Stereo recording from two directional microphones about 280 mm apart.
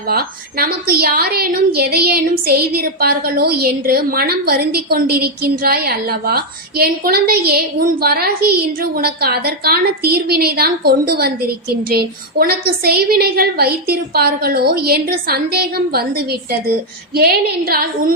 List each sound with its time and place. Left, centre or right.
0.1 s a woman's voice: right